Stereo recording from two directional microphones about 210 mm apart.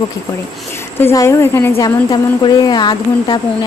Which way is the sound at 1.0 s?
15° left (ahead or behind).